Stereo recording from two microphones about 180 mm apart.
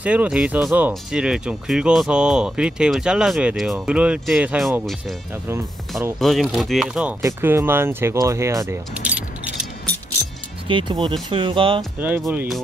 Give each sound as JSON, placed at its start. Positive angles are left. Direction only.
{"t": 0.0, "sound": "speech", "side_deg": -5}
{"t": 5.5, "sound": "speech", "side_deg": -15}
{"t": 6.1, "sound": "speech", "side_deg": 0}
{"t": 10.7, "sound": "speech", "side_deg": -25}
{"t": 12.3, "sound": "speech", "side_deg": -10}